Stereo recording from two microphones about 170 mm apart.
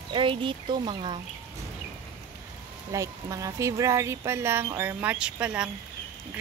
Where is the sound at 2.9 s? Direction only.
20° right (ahead or behind).